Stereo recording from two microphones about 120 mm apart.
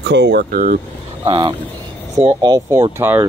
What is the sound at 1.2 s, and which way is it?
Speech, 45° right (ahead or behind).